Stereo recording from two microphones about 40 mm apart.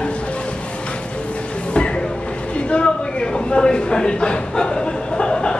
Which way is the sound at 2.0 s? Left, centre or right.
Left.